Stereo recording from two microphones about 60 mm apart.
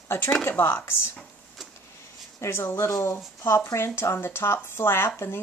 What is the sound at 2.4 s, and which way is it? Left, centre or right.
Speech, left.